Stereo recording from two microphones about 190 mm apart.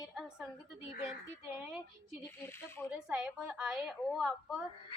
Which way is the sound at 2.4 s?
10° left (ahead or behind).